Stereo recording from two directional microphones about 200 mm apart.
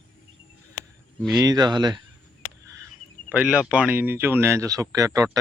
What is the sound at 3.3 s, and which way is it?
Speech, 5° right (ahead or behind).